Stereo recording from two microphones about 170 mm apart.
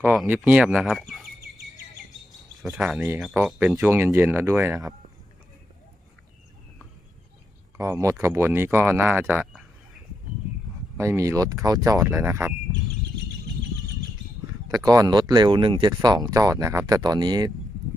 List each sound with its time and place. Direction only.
0.0 s speech: 5° right (ahead or behind)
2.6 s speech: centre (ahead or behind)
7.7 s speech: 15° right (ahead or behind)
11.0 s speech: 15° right (ahead or behind)
14.9 s speech: 25° right (ahead or behind)